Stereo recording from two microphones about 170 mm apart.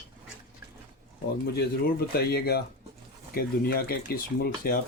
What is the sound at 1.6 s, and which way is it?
Speech, 70° left (ahead or behind).